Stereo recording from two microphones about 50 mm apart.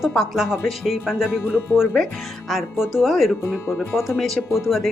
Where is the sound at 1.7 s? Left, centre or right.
Centre.